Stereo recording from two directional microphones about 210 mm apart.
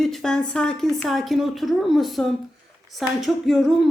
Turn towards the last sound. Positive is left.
turn(degrees=0)  # may be behind; listen again after turning